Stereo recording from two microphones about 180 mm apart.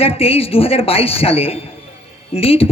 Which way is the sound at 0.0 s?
35° left (ahead or behind).